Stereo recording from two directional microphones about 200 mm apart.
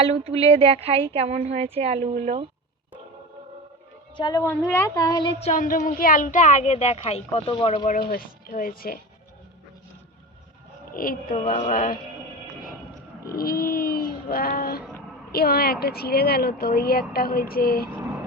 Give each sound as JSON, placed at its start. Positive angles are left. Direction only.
{"t": 0.0, "sound": "a woman's voice", "side_deg": -30}
{"t": 4.2, "sound": "a woman's voice", "side_deg": 20}
{"t": 5.4, "sound": "a woman's voice", "side_deg": 40}
{"t": 7.9, "sound": "a woman's voice", "side_deg": 45}
{"t": 10.9, "sound": "a woman's voice", "side_deg": 45}
{"t": 11.3, "sound": "a woman's voice", "side_deg": 30}
{"t": 13.2, "sound": "a woman's voice", "side_deg": 50}